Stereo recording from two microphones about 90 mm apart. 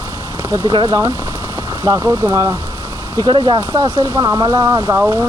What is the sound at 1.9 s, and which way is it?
Speech, 20° right (ahead or behind).